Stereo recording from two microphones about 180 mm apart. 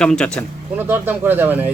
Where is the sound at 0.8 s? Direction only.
10° right (ahead or behind).